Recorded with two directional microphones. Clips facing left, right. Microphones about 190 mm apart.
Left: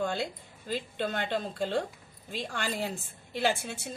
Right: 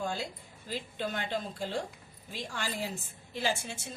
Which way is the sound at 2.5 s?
60° left (ahead or behind).